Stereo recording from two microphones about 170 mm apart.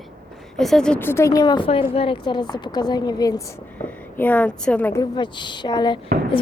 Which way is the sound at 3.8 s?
10° left (ahead or behind).